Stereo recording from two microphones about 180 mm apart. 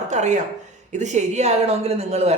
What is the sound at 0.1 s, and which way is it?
A woman's voice, 40° right (ahead or behind).